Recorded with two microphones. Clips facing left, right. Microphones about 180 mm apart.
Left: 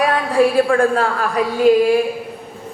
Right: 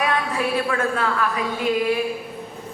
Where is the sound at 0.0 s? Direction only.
45° left (ahead or behind).